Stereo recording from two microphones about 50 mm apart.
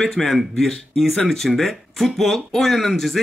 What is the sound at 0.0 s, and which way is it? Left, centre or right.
A man's voice, centre.